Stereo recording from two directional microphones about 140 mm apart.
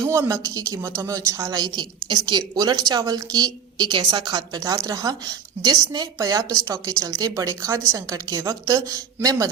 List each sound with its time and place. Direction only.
0.0 s speech: 20° right (ahead or behind)